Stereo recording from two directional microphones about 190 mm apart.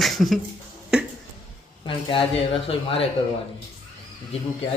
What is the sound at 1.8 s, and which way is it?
Speech, 30° left (ahead or behind).